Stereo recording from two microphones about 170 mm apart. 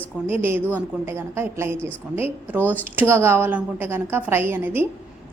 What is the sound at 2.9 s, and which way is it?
A woman's voice, 15° right (ahead or behind).